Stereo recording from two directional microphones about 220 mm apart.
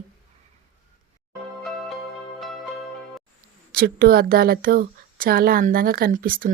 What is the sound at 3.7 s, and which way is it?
Speech, 40° right (ahead or behind).